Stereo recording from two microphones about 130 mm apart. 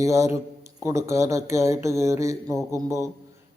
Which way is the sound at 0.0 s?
20° right (ahead or behind).